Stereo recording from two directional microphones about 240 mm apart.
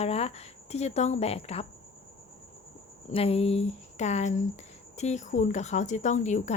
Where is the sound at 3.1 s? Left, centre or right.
Left.